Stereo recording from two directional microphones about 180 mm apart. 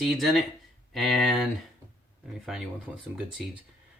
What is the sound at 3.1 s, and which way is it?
Speech, 5° right (ahead or behind).